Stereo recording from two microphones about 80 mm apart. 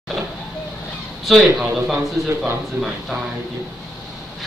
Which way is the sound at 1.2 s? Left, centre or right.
Centre.